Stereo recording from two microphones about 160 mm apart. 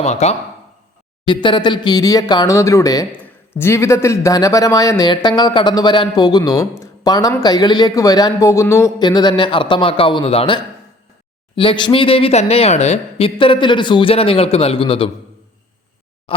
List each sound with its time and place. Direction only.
0.0 s speech: 45° left (ahead or behind)
1.3 s speech: 30° left (ahead or behind)